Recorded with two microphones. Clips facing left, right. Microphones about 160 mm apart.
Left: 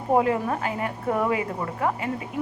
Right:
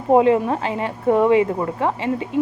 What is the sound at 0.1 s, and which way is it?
A woman's voice, 25° right (ahead or behind).